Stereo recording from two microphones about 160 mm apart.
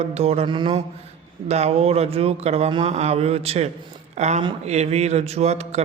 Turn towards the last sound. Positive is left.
turn(degrees=-40)  # may be behind; listen again after turning